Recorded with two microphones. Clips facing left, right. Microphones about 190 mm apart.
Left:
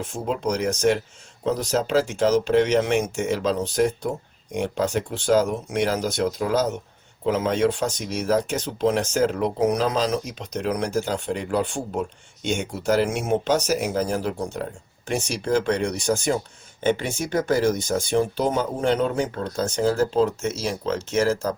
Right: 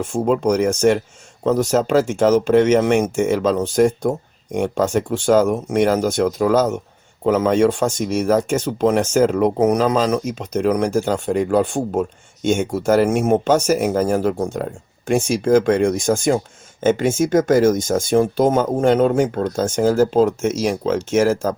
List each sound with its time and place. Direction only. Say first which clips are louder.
0.1 s speech: right 9 dB; 50° right (ahead or behind)
20.5 s speech: right 7 dB; 90° right
20.8 s speech: right 4 dB; 50° right (ahead or behind)